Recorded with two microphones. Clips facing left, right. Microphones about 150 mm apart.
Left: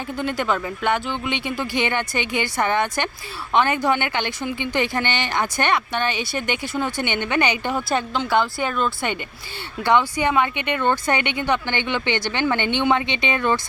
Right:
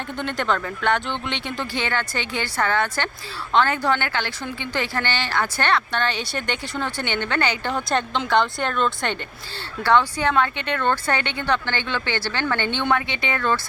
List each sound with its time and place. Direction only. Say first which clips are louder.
0.2 s speech: left 1 dB; 5° left (ahead or behind)